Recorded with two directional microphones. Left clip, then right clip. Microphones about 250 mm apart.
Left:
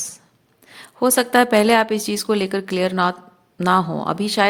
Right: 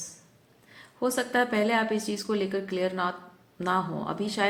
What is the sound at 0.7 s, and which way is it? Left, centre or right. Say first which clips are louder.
A woman's voice: left 10 dB; left.